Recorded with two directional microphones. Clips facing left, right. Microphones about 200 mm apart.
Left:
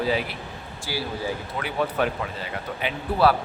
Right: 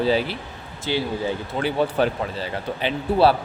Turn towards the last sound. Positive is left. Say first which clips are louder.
# right 3 dB
turn(degrees=-30)  # may be behind; listen again after turning